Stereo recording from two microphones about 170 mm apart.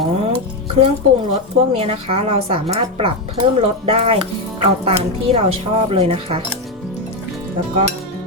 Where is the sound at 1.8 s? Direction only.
40° right (ahead or behind).